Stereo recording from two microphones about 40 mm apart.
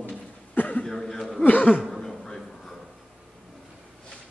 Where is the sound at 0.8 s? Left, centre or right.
Centre.